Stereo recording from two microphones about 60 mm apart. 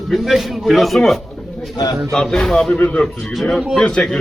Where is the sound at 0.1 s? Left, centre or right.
Centre.